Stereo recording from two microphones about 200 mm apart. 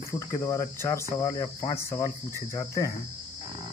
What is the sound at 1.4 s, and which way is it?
Speech, 35° left (ahead or behind).